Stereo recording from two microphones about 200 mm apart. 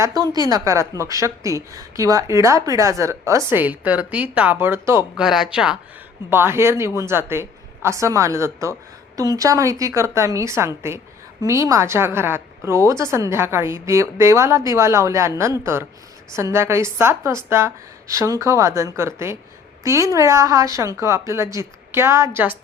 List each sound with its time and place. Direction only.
0.4 s a woman's voice: 15° right (ahead or behind)